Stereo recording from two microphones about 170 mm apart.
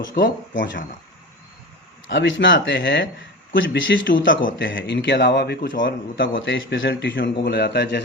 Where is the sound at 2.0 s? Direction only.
90° left.